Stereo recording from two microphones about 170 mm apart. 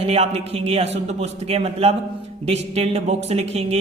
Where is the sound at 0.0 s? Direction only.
35° right (ahead or behind).